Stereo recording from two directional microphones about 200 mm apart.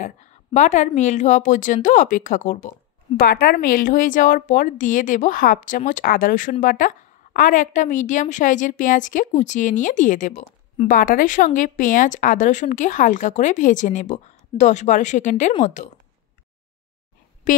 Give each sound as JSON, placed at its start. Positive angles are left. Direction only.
{"t": 0.0, "sound": "a woman's voice", "side_deg": 35}